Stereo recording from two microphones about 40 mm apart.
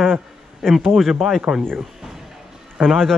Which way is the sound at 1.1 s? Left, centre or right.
Centre.